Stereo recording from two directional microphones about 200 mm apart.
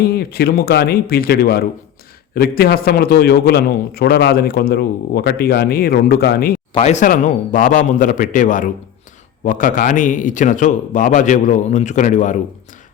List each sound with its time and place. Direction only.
0.0 s a man's voice: 50° left (ahead or behind)
6.7 s a man's voice: 35° left (ahead or behind)